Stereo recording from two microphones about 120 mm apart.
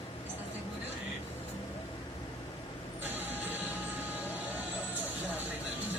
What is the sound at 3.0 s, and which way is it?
Printer, 15° right (ahead or behind).